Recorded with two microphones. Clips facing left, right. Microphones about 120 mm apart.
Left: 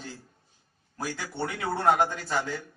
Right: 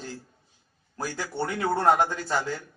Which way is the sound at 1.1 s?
30° right (ahead or behind).